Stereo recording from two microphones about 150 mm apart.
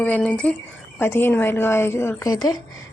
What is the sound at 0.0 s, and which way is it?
A woman's voice, 10° left (ahead or behind).